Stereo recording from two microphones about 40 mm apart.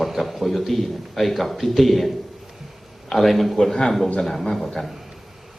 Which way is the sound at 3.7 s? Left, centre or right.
Centre.